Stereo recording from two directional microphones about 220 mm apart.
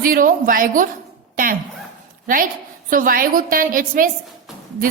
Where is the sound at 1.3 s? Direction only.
40° right (ahead or behind).